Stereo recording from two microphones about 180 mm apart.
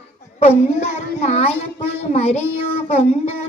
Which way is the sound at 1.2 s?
35° left (ahead or behind).